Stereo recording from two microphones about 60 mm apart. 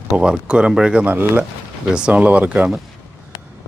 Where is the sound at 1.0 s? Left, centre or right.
Right.